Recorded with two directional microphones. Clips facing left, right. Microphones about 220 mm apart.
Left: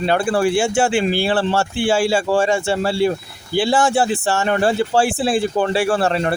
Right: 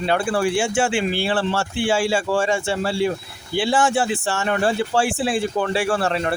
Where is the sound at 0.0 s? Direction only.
40° left (ahead or behind).